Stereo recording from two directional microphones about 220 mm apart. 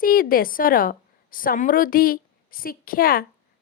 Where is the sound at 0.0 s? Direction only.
40° left (ahead or behind).